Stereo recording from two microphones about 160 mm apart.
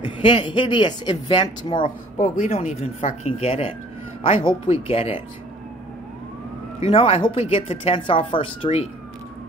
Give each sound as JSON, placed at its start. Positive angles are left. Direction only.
{"t": 0.0, "sound": "speech", "side_deg": 30}
{"t": 2.1, "sound": "speech", "side_deg": 50}
{"t": 6.9, "sound": "speech", "side_deg": 35}